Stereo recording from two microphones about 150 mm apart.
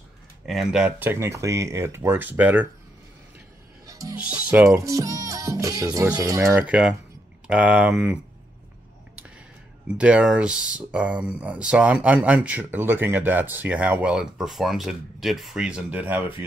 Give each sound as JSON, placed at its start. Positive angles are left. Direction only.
{"t": 0.5, "sound": "speech", "side_deg": 0}
{"t": 3.8, "sound": "music", "side_deg": -20}
{"t": 4.2, "sound": "speech", "side_deg": -10}
{"t": 4.6, "sound": "speech", "side_deg": -20}
{"t": 6.6, "sound": "speech", "side_deg": -5}
{"t": 9.9, "sound": "speech", "side_deg": -5}